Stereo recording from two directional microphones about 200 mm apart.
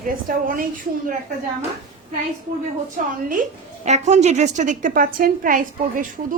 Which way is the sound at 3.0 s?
40° right (ahead or behind).